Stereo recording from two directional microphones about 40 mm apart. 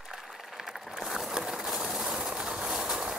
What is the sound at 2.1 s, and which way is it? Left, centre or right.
Vehicle, right.